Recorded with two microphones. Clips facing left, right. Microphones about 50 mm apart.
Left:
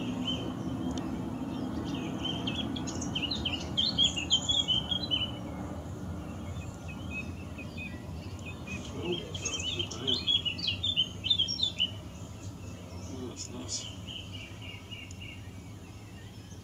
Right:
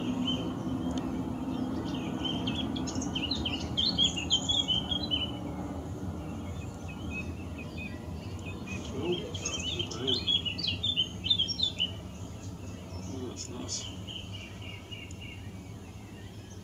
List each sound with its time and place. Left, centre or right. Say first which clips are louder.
0.0 s vehicle: right 2 dB; centre
2.8 s chirp: right 2 dB; centre
5.5 s vehicle: right 2 dB; centre
8.6 s a sound: right 2 dB; centre
9.9 s chirp: right 1 dB; centre